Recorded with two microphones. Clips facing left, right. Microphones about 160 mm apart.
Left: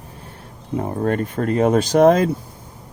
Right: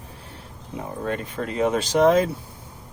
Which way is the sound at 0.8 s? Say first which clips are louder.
Left 7 dB; 50° left (ahead or behind).